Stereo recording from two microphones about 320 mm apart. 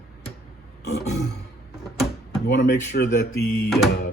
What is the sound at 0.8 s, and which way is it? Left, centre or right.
Grunt, left.